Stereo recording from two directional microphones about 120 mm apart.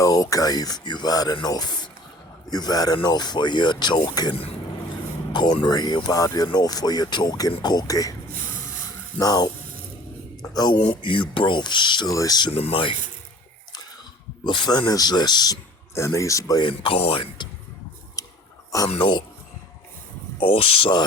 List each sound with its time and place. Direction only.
0.0 s speech: 30° left (ahead or behind)
9.1 s speech: 35° left (ahead or behind)
12.5 s speech: 50° left (ahead or behind)
14.4 s speech: 40° left (ahead or behind)
16.0 s speech: 25° left (ahead or behind)
16.6 s speech: 50° left (ahead or behind)
18.2 s a sound: 30° left (ahead or behind)
18.9 s speech: 40° left (ahead or behind)
20.4 s speech: 45° left (ahead or behind)